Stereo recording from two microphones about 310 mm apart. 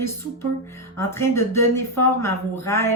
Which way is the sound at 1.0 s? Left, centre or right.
Centre.